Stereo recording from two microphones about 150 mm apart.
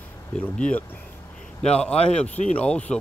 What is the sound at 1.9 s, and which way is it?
Speech, 45° left (ahead or behind).